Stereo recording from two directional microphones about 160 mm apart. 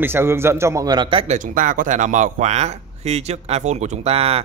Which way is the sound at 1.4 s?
55° right (ahead or behind).